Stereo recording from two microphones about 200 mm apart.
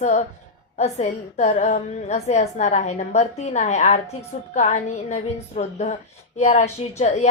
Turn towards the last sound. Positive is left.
turn(degrees=35)  # may be behind; listen again after turning